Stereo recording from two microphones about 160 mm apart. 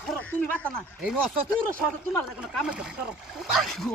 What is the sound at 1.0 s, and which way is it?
Speech, 5° right (ahead or behind).